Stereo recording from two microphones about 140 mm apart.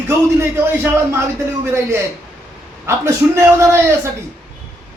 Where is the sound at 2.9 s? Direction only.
20° right (ahead or behind).